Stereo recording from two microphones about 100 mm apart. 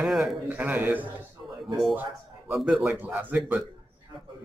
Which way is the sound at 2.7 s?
15° right (ahead or behind).